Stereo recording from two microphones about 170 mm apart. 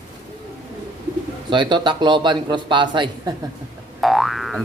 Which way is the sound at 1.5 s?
25° right (ahead or behind).